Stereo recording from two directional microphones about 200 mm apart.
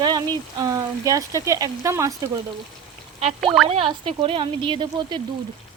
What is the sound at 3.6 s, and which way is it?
Speech, 25° right (ahead or behind).